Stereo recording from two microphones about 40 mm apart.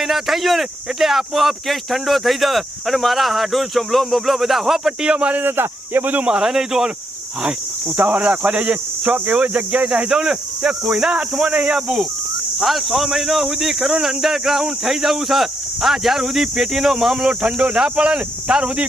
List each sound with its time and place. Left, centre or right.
0.0 s speech: centre
5.0 s speech: right
5.3 s speech: right
6.2 s speech: centre
7.9 s speech: right
10.1 s speech: centre
12.5 s speech: centre; by 18.9 s right